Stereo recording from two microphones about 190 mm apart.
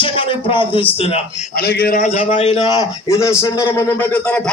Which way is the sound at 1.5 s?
55° left (ahead or behind).